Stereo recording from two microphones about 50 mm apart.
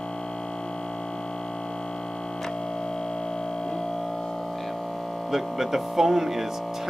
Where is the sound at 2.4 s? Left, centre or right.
Centre.